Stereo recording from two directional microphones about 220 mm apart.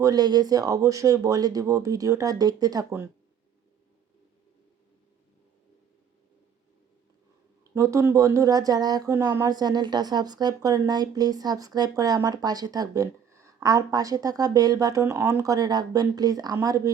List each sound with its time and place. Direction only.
0.0 s speech: 15° right (ahead or behind)
7.8 s speech: 15° right (ahead or behind)